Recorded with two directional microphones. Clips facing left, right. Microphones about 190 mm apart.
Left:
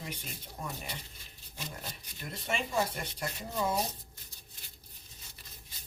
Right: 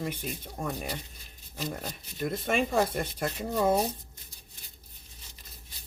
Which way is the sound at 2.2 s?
50° right (ahead or behind).